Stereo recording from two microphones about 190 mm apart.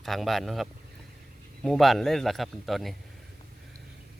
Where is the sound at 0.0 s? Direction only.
Centre (ahead or behind).